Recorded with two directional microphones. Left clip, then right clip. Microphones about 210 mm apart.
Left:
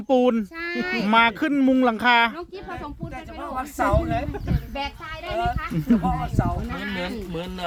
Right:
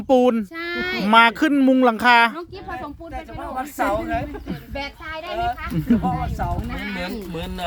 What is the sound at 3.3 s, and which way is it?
A child's voice, 10° right (ahead or behind).